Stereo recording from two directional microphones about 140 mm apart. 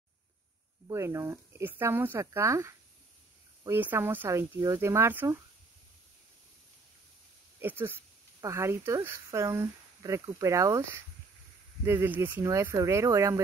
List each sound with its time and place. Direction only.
0.8 s speech: 20° right (ahead or behind)
7.6 s speech: 15° right (ahead or behind)